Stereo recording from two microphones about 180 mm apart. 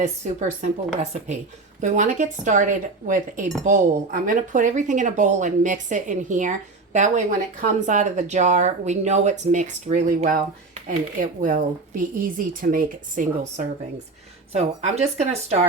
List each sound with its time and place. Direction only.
0.0 s speech: 40° right (ahead or behind)
1.8 s speech: 45° right (ahead or behind)